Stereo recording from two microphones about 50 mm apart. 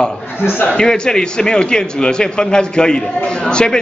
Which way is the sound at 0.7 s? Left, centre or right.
Centre.